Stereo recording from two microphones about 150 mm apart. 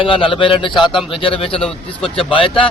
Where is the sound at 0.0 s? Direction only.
35° left (ahead or behind).